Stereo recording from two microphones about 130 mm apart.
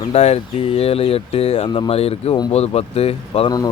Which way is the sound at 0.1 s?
55° left (ahead or behind).